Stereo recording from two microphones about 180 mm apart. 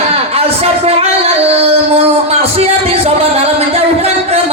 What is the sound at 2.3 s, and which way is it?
Speech, 35° right (ahead or behind).